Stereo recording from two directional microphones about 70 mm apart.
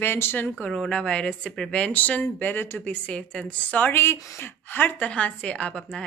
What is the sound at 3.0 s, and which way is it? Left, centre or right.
A woman's voice, centre.